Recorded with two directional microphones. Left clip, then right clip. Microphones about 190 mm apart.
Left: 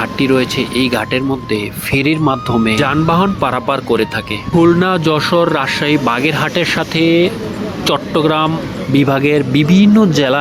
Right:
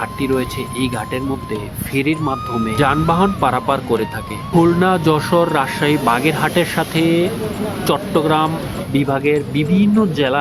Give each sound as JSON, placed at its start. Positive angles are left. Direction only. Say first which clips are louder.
{"t": 0.0, "sound": "speech", "louder": "left 5 dB", "side_deg": 20}